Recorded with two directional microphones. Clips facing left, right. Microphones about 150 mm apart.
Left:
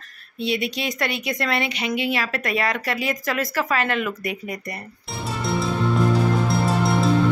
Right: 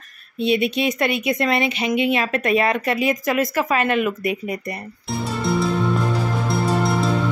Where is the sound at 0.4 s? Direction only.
20° right (ahead or behind).